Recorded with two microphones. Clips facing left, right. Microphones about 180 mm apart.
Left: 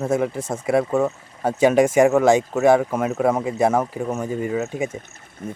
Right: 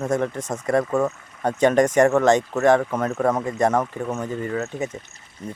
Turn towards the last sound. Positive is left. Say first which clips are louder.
# left 2 dB
turn(degrees=55)  # may be behind; listen again after turning